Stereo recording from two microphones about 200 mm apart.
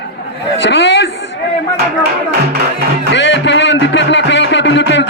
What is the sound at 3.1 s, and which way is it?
Music, 60° left (ahead or behind).